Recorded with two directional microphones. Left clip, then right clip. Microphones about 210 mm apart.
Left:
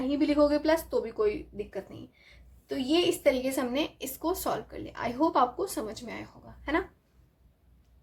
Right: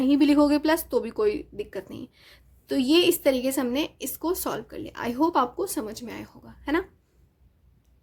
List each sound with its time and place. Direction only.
0.0 s speech: 40° right (ahead or behind)